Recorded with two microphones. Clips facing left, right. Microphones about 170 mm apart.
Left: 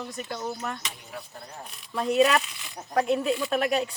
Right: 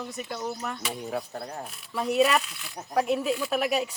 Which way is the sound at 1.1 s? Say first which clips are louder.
Right 8 dB; 70° right (ahead or behind).